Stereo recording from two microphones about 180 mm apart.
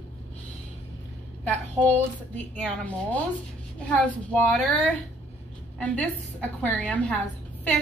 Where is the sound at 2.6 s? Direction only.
10° left (ahead or behind).